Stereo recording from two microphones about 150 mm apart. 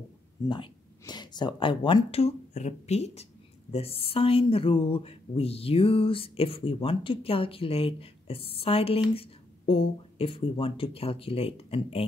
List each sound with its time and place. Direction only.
0.5 s speech: 30° left (ahead or behind)